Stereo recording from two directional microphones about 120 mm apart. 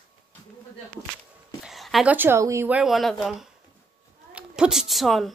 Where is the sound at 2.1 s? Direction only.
20° right (ahead or behind).